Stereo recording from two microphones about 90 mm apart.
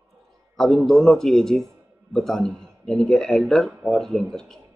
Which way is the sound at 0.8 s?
5° left (ahead or behind).